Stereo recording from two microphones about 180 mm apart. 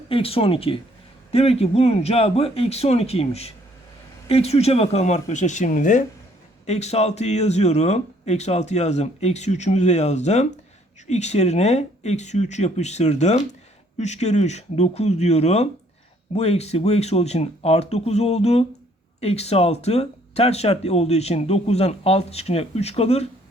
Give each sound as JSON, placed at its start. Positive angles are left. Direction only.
{"t": 0.1, "sound": "speech", "side_deg": 30}